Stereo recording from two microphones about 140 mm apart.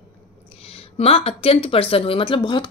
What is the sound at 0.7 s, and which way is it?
Speech, 45° left (ahead or behind).